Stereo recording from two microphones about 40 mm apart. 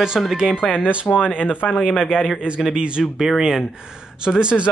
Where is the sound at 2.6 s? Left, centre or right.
Right.